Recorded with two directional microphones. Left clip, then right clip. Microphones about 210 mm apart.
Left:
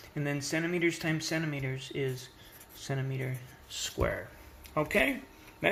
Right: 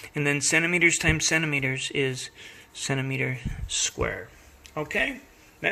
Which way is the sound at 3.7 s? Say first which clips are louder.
Right 5 dB; 25° right (ahead or behind).